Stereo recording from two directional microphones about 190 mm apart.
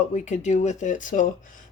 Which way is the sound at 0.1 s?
40° left (ahead or behind).